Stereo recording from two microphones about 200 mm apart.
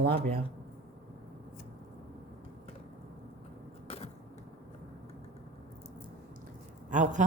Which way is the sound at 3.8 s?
30° left (ahead or behind).